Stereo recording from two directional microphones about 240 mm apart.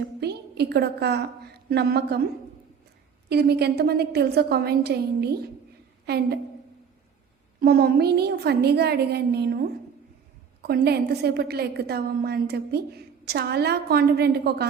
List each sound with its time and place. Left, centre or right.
0.2 s a woman's voice: right
3.2 s a woman's voice: right
7.6 s a woman's voice: right